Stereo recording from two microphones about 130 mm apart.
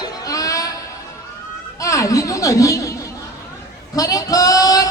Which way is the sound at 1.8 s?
25° left (ahead or behind).